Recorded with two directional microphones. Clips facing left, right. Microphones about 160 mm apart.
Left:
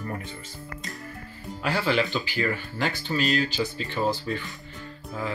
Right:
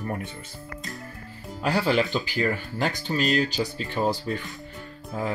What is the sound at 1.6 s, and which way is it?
Speech, 40° right (ahead or behind).